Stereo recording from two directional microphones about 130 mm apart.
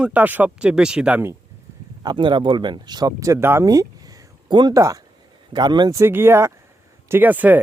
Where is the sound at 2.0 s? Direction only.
35° right (ahead or behind).